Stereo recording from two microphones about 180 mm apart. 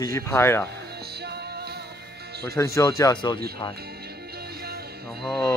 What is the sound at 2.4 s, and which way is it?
Speech, 15° left (ahead or behind).